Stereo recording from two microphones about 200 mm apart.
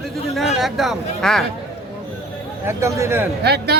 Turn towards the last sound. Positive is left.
turn(degrees=-55)  # may be behind; listen again after turning